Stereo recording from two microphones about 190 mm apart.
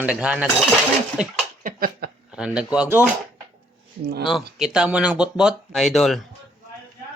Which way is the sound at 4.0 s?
55° right (ahead or behind).